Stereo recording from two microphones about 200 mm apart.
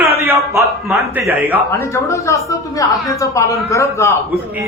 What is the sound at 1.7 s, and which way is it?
A man's voice, 15° left (ahead or behind).